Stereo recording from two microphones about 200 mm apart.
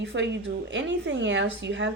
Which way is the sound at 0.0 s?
65° right (ahead or behind).